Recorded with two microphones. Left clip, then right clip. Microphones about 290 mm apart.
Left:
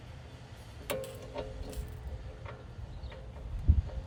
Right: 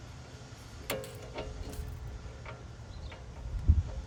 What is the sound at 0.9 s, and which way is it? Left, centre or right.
Music, centre.